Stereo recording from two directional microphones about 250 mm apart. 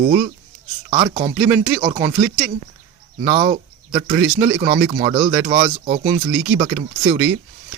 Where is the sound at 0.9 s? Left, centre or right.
Right.